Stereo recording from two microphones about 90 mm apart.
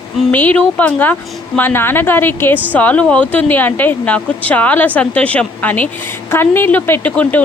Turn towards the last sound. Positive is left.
turn(degrees=20)  # may be behind; listen again after turning